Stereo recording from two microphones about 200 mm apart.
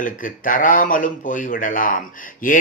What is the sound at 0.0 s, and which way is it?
A man's voice, 40° left (ahead or behind).